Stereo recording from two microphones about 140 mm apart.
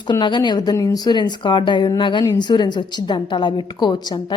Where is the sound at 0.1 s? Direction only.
30° left (ahead or behind).